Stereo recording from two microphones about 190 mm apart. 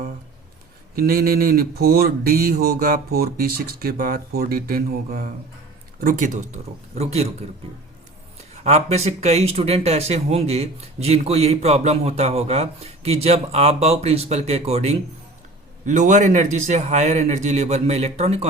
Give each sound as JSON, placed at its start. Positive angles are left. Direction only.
{"t": 0.9, "sound": "speech", "side_deg": -50}
{"t": 8.6, "sound": "speech", "side_deg": -35}